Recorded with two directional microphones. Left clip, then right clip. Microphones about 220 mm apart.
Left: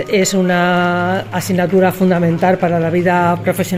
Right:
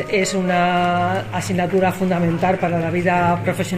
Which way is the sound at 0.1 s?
55° left (ahead or behind).